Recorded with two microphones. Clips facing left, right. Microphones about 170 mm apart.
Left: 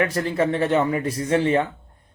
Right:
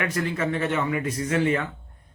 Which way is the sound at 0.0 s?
35° left (ahead or behind).